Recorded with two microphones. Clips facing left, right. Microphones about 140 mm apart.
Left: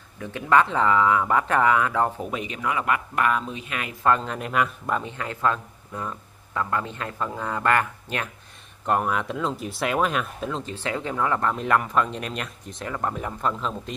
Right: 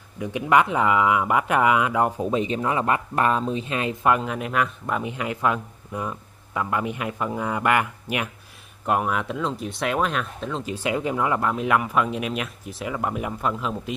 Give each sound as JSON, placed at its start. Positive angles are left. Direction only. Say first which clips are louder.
{"t": 0.2, "sound": "speech", "louder": "right 1 dB", "side_deg": -15}
{"t": 2.3, "sound": "speech", "louder": "right 5 dB", "side_deg": -30}
{"t": 4.0, "sound": "speech", "louder": "left 1 dB", "side_deg": -10}
{"t": 5.0, "sound": "speech", "louder": "right 1 dB", "side_deg": -15}
{"t": 10.6, "sound": "speech", "louder": "right 4 dB", "side_deg": -15}